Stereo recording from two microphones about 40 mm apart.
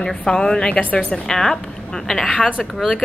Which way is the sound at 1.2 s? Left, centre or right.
Centre.